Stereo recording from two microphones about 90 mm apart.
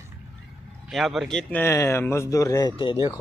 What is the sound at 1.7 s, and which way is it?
Speech, 30° left (ahead or behind).